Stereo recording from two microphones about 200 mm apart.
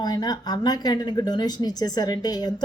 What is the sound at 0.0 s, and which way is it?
Speech, 20° left (ahead or behind).